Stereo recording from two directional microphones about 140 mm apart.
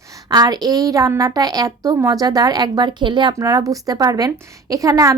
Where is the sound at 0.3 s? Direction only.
30° right (ahead or behind).